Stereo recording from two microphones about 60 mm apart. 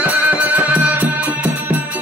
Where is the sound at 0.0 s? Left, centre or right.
Right.